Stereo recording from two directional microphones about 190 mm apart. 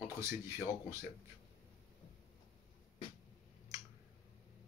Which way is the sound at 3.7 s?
20° right (ahead or behind).